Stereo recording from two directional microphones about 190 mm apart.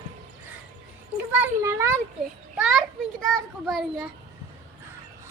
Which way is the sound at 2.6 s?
Centre (ahead or behind).